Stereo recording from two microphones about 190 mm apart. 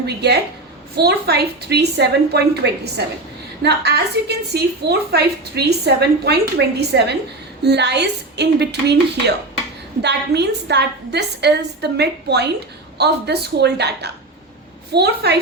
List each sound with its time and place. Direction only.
0.0 s a woman's voice: 60° right (ahead or behind)